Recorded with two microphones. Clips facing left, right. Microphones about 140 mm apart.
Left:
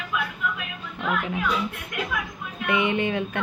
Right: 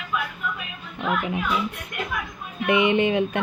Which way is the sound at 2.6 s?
20° right (ahead or behind).